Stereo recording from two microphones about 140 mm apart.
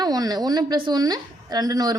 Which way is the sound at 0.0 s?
30° right (ahead or behind).